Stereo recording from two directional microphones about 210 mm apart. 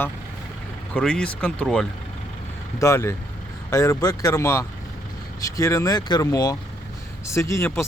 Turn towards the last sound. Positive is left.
turn(degrees=15)  # may be behind; listen again after turning